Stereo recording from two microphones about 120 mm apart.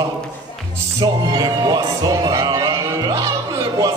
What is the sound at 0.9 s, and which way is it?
Music, 35° right (ahead or behind).